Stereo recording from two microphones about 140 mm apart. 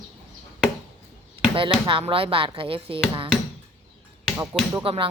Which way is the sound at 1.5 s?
40° right (ahead or behind).